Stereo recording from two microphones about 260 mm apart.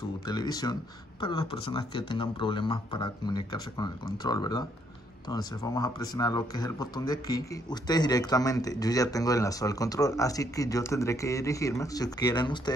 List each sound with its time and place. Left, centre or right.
0.3 s speech: centre